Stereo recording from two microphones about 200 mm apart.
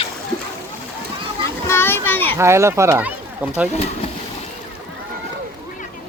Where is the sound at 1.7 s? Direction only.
10° left (ahead or behind).